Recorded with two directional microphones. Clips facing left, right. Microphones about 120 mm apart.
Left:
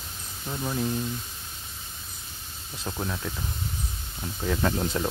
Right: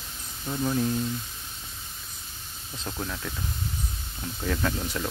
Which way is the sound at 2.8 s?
15° left (ahead or behind).